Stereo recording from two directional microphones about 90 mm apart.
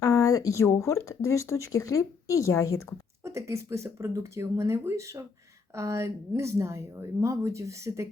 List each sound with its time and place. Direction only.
0.0 s speech: 40° left (ahead or behind)
3.2 s a woman's voice: 35° right (ahead or behind)